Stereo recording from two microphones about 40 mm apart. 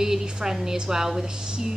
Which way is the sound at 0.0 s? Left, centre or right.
Centre.